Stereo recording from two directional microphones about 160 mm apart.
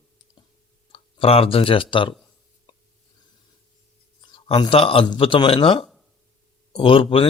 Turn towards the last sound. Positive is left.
turn(degrees=35)  # may be behind; listen again after turning